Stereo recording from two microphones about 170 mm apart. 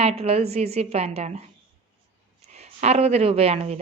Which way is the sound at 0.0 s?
35° right (ahead or behind).